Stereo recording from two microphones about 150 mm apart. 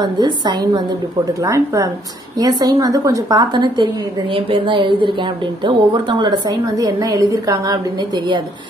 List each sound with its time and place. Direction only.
0.0 s a woman's voice: 30° right (ahead or behind)